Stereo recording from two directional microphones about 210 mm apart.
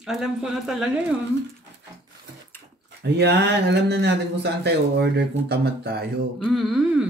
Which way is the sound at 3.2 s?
55° right (ahead or behind).